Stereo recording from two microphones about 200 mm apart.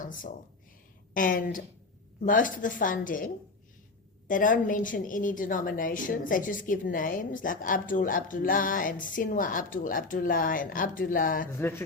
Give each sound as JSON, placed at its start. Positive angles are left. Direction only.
{"t": 0.0, "sound": "a woman's voice", "side_deg": 40}
{"t": 4.3, "sound": "a woman's voice", "side_deg": 40}